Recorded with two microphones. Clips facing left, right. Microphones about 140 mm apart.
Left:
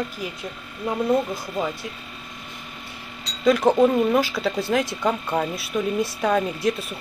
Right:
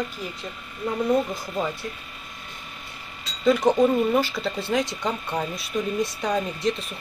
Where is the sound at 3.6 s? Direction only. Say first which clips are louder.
Left 2 dB; 30° left (ahead or behind).